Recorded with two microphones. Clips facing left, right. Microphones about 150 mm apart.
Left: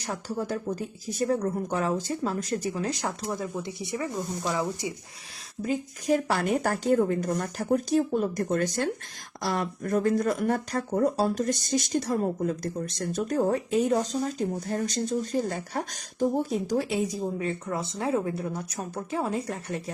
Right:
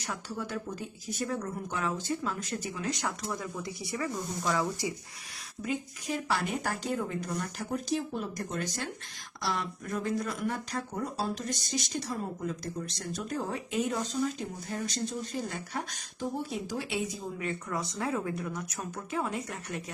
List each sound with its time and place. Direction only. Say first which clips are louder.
0.0 s speech: left 5 dB; 40° left (ahead or behind); by 4.9 s 20° left (ahead or behind)
5.6 s speech: left 7 dB; 40° left (ahead or behind)